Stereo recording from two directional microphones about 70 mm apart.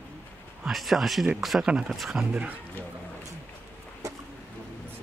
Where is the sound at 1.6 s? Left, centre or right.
Centre.